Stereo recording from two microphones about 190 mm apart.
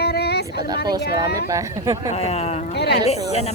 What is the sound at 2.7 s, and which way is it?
Speech, 60° left (ahead or behind).